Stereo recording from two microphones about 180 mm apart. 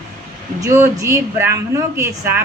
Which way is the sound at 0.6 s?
15° right (ahead or behind).